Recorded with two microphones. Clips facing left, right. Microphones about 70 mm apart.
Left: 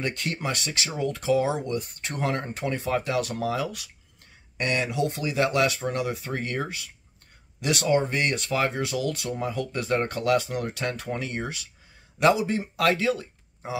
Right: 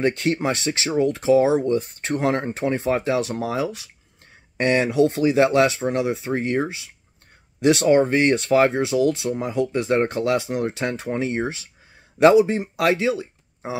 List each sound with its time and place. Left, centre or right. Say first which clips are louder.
0.0 s speech: right 9 dB; right